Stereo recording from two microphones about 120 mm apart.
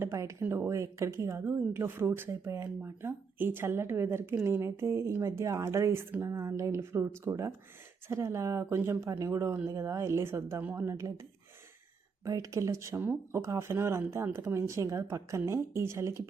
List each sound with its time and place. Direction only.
0.0 s speech: 25° right (ahead or behind)
12.2 s speech: 30° right (ahead or behind)